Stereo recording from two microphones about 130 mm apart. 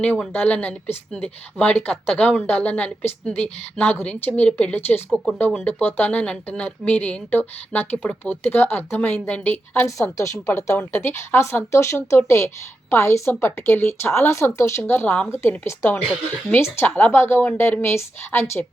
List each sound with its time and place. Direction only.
0.0 s a woman's voice: 10° left (ahead or behind)